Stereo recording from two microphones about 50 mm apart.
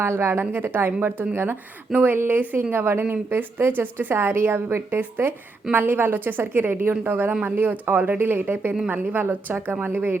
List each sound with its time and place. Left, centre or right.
0.0 s a woman's voice: right
0.5 s a woman's voice: right
2.7 s a woman's voice: right
3.0 s a woman's voice: right